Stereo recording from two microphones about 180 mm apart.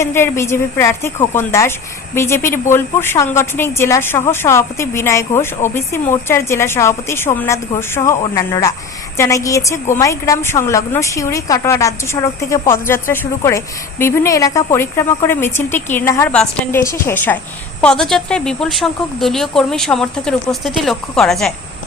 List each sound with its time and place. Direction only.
0.0 s a woman's voice: 15° left (ahead or behind)